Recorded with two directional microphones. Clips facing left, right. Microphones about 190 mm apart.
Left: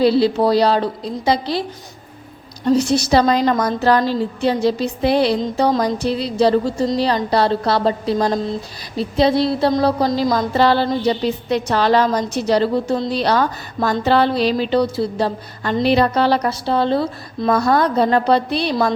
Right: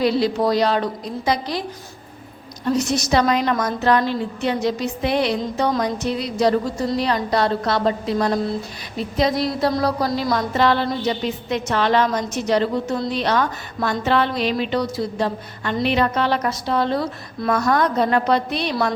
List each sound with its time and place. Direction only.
0.0 s a woman's voice: 30° left (ahead or behind)
2.6 s a woman's voice: 30° left (ahead or behind)